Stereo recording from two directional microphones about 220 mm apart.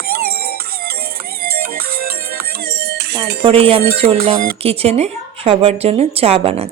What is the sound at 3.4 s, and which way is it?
Speech, 25° right (ahead or behind).